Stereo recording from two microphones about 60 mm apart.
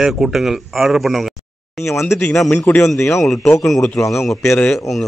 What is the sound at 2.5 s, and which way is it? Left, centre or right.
Speech, left.